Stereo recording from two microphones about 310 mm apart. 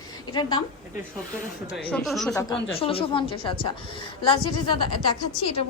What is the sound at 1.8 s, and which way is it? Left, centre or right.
Speech, centre.